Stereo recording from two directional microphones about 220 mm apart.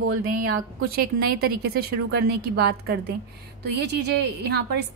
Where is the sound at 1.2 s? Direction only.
50° right (ahead or behind).